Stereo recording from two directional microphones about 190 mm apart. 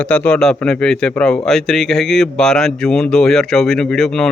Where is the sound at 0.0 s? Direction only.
5° left (ahead or behind).